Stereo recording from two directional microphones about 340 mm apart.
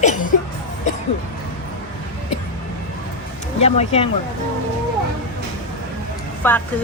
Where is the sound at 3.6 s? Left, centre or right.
Centre.